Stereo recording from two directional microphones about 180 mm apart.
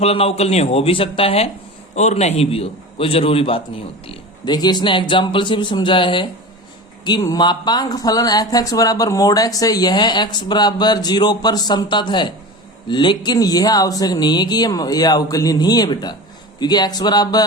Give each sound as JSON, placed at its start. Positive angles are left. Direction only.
{"t": 0.0, "sound": "a man's voice", "side_deg": 35}